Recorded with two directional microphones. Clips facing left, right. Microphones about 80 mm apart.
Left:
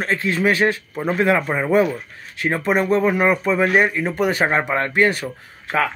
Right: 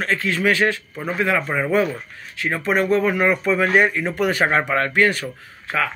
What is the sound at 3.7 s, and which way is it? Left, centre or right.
Speech, centre.